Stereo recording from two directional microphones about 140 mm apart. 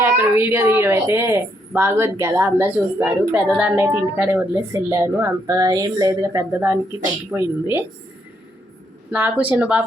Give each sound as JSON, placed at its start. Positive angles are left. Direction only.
{"t": 0.0, "sound": "a woman's voice", "side_deg": -15}
{"t": 7.3, "sound": "a woman's voice", "side_deg": -5}
{"t": 9.1, "sound": "a woman's voice", "side_deg": -10}